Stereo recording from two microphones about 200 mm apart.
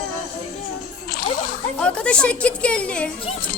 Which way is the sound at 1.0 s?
45° left (ahead or behind).